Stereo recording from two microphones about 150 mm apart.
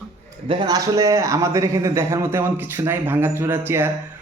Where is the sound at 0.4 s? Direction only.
35° right (ahead or behind).